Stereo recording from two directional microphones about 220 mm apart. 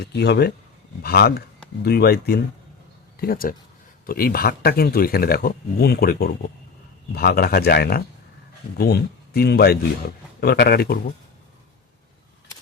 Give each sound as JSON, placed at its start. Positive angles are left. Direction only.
{"t": 0.0, "sound": "speech", "side_deg": 50}